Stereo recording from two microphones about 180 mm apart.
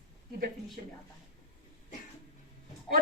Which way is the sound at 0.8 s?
50° right (ahead or behind).